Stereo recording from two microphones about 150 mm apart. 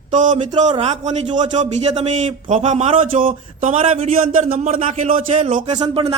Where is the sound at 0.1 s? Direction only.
60° right (ahead or behind).